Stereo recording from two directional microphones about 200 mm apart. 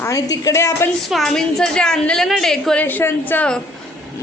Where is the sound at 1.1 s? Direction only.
Centre (ahead or behind).